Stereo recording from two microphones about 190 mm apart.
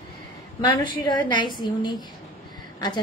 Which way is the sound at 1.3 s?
25° left (ahead or behind).